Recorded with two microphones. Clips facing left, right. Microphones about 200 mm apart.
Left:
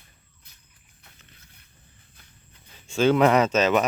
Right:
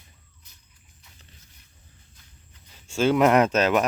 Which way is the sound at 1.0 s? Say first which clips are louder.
Left 1 dB; 55° left (ahead or behind).